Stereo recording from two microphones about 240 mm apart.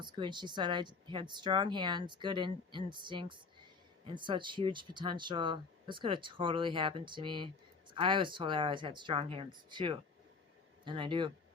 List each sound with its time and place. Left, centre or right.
0.0 s speech: centre